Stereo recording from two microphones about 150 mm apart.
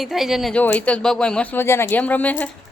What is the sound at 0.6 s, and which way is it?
A woman's voice, 10° left (ahead or behind).